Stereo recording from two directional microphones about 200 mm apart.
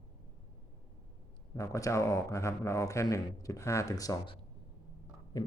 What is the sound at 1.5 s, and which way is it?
A man's voice, 15° left (ahead or behind).